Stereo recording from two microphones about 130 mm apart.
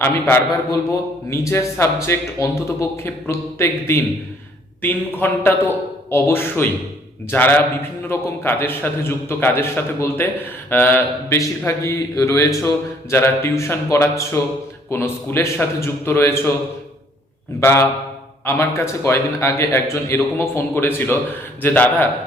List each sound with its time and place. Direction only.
0.0 s a man's voice: 15° left (ahead or behind)
17.6 s a man's voice: 20° left (ahead or behind)